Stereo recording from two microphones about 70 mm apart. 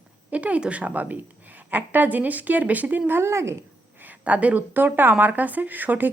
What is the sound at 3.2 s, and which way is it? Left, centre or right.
Speech, right.